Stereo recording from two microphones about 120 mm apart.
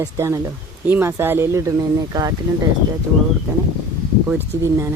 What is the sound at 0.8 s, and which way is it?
Speech, 15° right (ahead or behind).